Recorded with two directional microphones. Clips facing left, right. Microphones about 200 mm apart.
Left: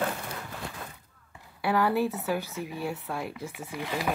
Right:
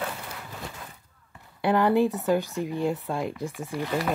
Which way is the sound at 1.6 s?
20° right (ahead or behind).